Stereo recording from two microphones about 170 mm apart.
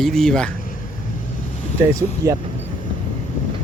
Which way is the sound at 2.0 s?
20° right (ahead or behind).